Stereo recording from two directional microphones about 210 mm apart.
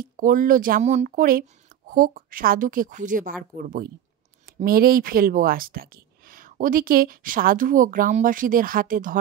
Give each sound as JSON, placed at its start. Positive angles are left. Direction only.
{"t": 0.0, "sound": "a woman's voice", "side_deg": -40}